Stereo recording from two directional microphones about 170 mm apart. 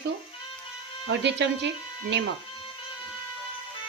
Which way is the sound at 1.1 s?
90° right.